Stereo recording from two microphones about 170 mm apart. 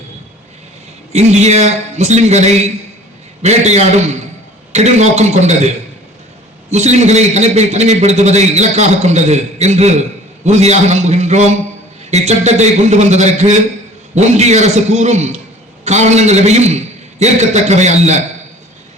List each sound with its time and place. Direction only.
1.1 s a man's voice: 40° right (ahead or behind)